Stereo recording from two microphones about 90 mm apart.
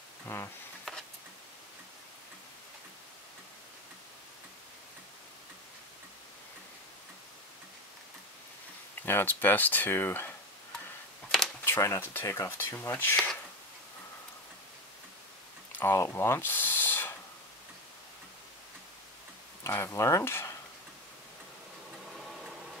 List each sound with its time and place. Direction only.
0.3 s speech: 25° left (ahead or behind)
0.9 s a sound: centre (ahead or behind)
9.0 s speech: 20° left (ahead or behind)
11.6 s speech: 25° left (ahead or behind)
15.8 s speech: 25° left (ahead or behind)
19.6 s speech: 30° left (ahead or behind)